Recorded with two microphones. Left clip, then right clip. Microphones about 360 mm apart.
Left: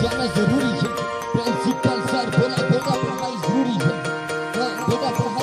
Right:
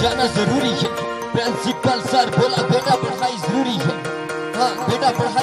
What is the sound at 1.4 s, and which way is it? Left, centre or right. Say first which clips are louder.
Music: right 2 dB; centre.